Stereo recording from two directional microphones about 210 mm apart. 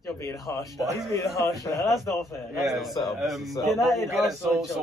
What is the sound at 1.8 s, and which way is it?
A man's voice, centre (ahead or behind).